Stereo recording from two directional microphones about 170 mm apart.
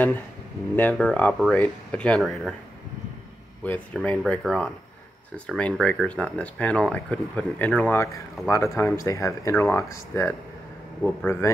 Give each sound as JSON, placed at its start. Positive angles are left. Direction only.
{"t": 0.7, "sound": "speech", "side_deg": 5}
{"t": 3.6, "sound": "speech", "side_deg": 10}